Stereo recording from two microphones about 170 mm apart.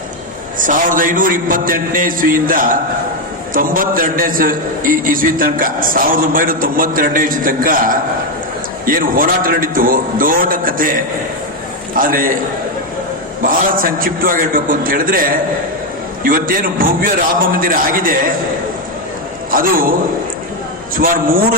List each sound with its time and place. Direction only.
0.6 s a man's voice: 50° right (ahead or behind)
13.4 s a man's voice: 55° right (ahead or behind)
19.5 s a man's voice: 55° right (ahead or behind)